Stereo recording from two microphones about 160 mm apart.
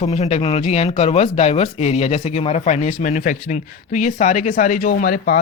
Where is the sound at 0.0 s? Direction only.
40° left (ahead or behind).